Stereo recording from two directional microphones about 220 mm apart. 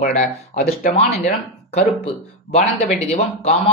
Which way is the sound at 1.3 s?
30° left (ahead or behind).